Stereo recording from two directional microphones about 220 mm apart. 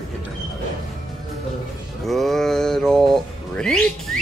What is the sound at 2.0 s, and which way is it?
Music, centre (ahead or behind).